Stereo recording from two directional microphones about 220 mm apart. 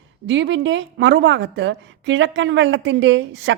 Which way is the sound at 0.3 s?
55° right (ahead or behind).